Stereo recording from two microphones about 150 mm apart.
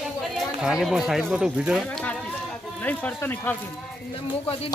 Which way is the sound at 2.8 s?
10° left (ahead or behind).